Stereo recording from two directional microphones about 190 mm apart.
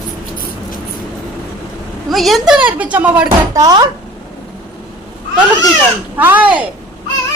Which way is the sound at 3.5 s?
20° right (ahead or behind).